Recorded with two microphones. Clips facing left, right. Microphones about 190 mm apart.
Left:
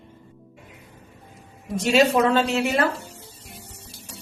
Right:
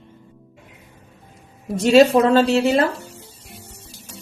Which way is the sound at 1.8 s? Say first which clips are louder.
Right 6 dB; 35° right (ahead or behind).